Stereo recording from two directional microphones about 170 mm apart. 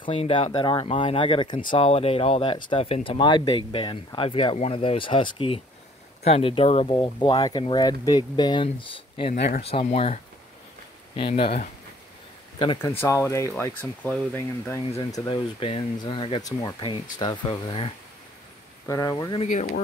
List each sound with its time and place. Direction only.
0.0 s speech: 30° left (ahead or behind)
12.8 s speech: 15° left (ahead or behind)
15.6 s speech: 30° left (ahead or behind)
18.9 s speech: 20° left (ahead or behind)
19.4 s speech: 45° left (ahead or behind)